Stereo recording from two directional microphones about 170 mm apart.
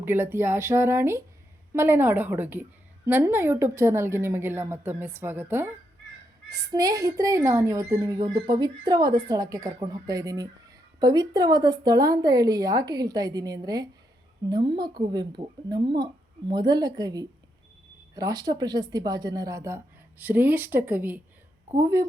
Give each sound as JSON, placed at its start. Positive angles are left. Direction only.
{"t": 0.0, "sound": "a woman's voice", "side_deg": -15}